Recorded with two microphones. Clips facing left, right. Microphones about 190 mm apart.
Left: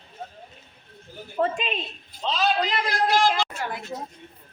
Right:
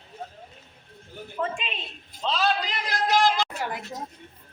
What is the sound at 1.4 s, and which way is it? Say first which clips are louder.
Speech: left 6 dB; 40° left (ahead or behind).